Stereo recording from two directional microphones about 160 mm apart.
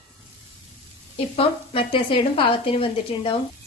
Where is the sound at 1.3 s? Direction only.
35° left (ahead or behind).